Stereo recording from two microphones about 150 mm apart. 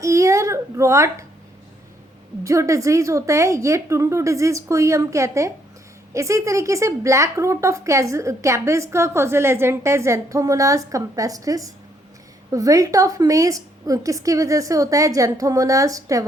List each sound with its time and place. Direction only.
0.0 s whimper: 20° right (ahead or behind)
2.4 s a woman's voice: 20° right (ahead or behind)